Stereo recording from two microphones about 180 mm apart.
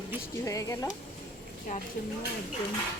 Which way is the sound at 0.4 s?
15° left (ahead or behind).